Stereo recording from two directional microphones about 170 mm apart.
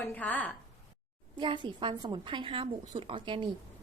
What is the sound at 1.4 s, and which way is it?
A woman's voice, 30° right (ahead or behind).